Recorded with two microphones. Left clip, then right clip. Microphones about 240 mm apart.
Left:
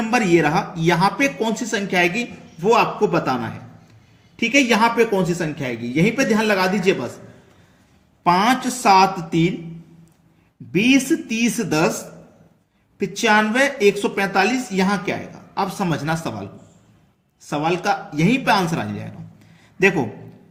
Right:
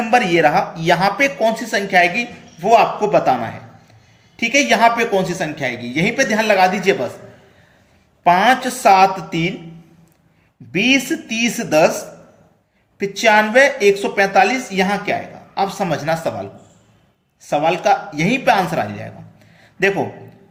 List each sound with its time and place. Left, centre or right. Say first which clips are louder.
0.1 s speech: right 4 dB; centre
8.2 s speech: right 4 dB; left
10.7 s speech: right 1 dB; left
13.0 s speech: right 4 dB; left
17.5 s speech: right 6 dB; left
19.5 s a sound: right 1 dB; left